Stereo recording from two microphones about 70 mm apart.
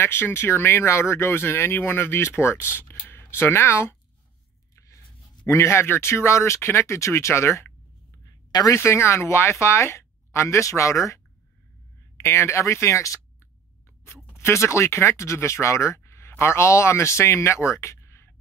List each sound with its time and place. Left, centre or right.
0.0 s speech: left
4.7 s a sound: left
5.5 s speech: left
8.3 s a sound: left
8.7 s speech: left
12.2 s speech: left
14.0 s speech: left